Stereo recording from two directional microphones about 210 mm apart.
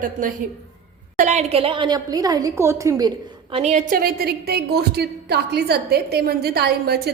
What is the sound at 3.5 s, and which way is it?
A woman's voice, 30° right (ahead or behind).